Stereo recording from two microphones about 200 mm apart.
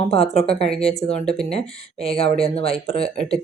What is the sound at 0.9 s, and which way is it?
Speech, 30° left (ahead or behind).